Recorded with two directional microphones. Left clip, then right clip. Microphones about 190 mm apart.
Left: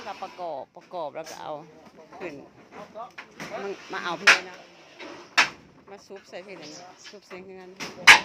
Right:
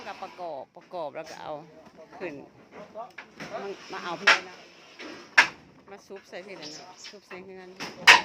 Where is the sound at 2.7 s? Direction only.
40° left (ahead or behind).